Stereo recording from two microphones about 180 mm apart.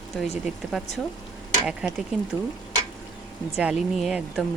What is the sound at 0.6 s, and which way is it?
Speech, 5° right (ahead or behind).